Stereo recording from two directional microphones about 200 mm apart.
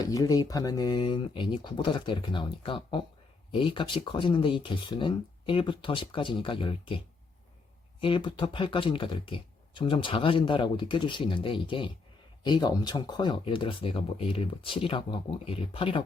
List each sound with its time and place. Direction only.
0.0 s speech: 15° left (ahead or behind)
8.0 s speech: 25° left (ahead or behind)